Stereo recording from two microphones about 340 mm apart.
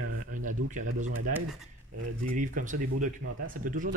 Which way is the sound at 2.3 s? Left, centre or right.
Right.